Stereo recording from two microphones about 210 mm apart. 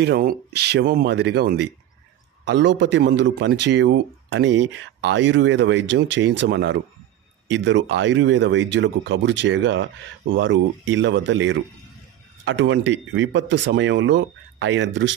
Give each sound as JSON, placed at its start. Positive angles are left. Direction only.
{"t": 0.0, "sound": "speech", "side_deg": -45}